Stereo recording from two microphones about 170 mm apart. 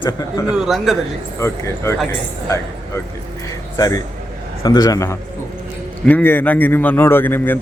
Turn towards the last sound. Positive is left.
turn(degrees=10)  # may be behind; listen again after turning